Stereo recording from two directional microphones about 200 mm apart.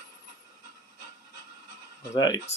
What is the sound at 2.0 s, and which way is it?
Speech, 20° left (ahead or behind).